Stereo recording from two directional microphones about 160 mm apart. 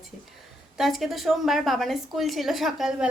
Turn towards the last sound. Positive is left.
turn(degrees=-5)  # may be behind; listen again after turning